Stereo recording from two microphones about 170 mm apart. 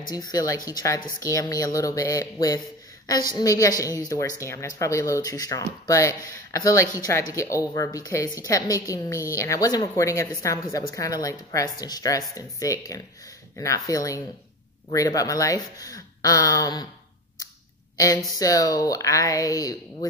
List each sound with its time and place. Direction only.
0.1 s a woman's voice: 20° left (ahead or behind)
17.9 s a woman's voice: 20° left (ahead or behind)